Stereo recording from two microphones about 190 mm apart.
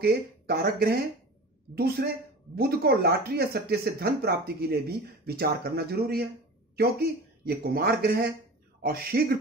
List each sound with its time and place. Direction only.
0.0 s a man's voice: 55° right (ahead or behind)